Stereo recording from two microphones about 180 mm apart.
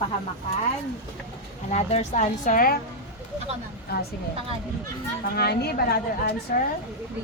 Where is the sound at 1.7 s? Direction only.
40° left (ahead or behind).